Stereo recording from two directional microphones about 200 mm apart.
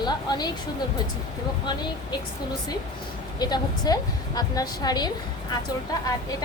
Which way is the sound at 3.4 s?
20° left (ahead or behind).